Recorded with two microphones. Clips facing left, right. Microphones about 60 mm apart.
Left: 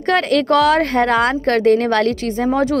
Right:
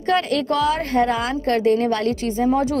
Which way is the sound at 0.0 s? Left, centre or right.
Left.